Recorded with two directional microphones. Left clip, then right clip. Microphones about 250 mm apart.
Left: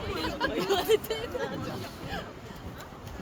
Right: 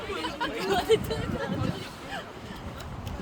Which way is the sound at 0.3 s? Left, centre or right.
Left.